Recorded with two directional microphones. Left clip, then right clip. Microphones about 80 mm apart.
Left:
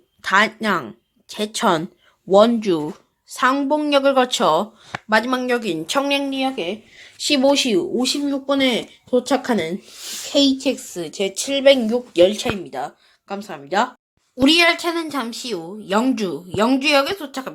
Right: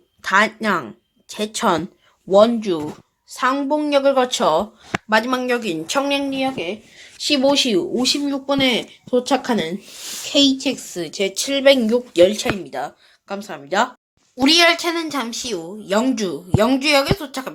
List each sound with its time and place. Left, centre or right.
0.2 s speech: centre
2.3 s speech: left
2.6 s speech: left
3.6 s speech: left
7.5 s a woman's voice: centre
8.0 s speech: right
8.4 s a woman's voice: centre; by 9.7 s left
10.6 s a woman's voice: centre
12.6 s speech: centre
14.4 s a woman's voice: centre
14.8 s a woman's voice: left